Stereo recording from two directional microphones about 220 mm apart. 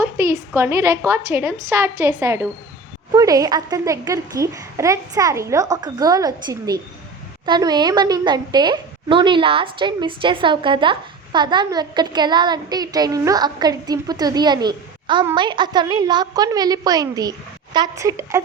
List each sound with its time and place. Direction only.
0.0 s a child's voice: 15° right (ahead or behind)